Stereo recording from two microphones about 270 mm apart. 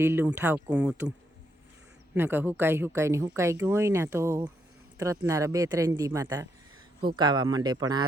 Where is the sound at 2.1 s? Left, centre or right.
Centre.